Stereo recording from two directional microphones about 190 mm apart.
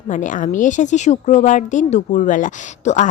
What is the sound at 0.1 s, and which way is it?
A woman's voice, 40° left (ahead or behind).